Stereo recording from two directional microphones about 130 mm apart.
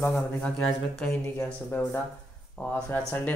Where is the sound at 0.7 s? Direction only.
Centre (ahead or behind).